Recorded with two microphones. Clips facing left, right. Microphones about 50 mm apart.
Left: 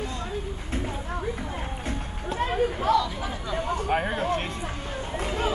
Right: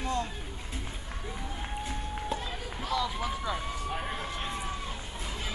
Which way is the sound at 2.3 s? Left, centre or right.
Left.